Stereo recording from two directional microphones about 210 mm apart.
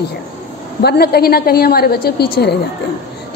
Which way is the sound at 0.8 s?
50° left (ahead or behind).